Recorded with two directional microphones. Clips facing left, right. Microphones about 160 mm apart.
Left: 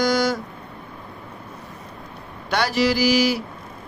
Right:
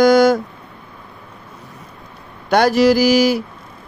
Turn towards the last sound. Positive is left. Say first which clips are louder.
# right 6 dB
turn(degrees=-45)  # may be behind; listen again after turning